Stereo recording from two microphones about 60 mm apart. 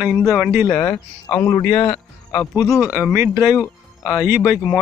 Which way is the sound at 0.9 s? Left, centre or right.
Left.